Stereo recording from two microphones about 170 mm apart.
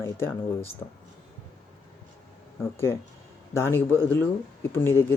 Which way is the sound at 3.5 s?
15° left (ahead or behind).